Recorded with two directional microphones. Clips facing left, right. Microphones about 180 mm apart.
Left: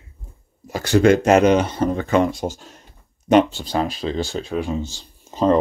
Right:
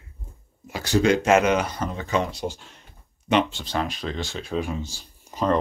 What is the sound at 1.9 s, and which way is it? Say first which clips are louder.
Speech: left 9 dB; 55° left (ahead or behind).